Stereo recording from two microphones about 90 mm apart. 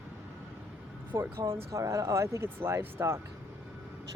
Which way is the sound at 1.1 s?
30° right (ahead or behind).